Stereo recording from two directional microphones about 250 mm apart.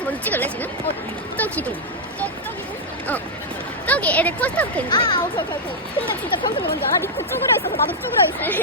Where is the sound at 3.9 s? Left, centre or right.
Centre.